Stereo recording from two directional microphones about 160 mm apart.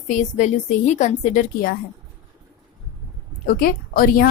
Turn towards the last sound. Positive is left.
turn(degrees=65)  # may be behind; listen again after turning